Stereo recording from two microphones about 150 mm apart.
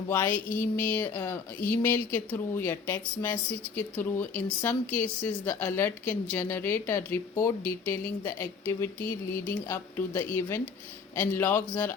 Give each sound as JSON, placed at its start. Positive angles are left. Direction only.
{"t": 0.1, "sound": "speech", "side_deg": 10}
{"t": 9.0, "sound": "a sound", "side_deg": 65}
{"t": 9.6, "sound": "speech", "side_deg": 15}